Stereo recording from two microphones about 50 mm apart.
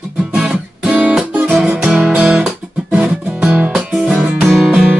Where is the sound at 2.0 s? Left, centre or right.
Right.